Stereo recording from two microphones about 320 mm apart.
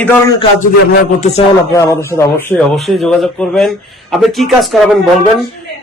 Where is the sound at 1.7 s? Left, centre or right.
Centre.